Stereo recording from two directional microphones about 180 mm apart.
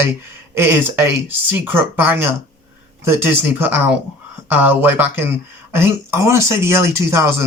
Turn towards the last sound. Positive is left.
turn(degrees=-15)  # may be behind; listen again after turning